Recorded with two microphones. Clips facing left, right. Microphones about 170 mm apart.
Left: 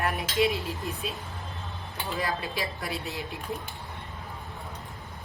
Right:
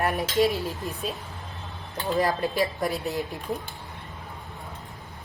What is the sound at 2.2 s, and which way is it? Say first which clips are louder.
A woman's voice: right 4 dB; 45° right (ahead or behind).